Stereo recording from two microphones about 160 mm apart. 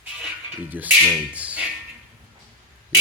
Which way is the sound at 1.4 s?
10° right (ahead or behind).